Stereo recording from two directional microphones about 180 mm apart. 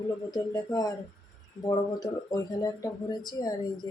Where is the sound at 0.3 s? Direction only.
20° left (ahead or behind).